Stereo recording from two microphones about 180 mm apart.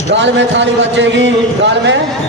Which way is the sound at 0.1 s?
85° right.